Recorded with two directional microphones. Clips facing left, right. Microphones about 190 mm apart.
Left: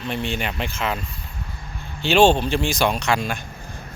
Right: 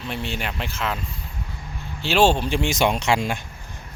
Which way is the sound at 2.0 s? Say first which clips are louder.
Left 3 dB; 5° right (ahead or behind).